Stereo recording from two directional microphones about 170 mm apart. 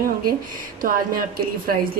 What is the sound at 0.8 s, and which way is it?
Speech, 55° right (ahead or behind).